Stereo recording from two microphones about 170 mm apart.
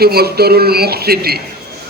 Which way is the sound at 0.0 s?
65° right (ahead or behind).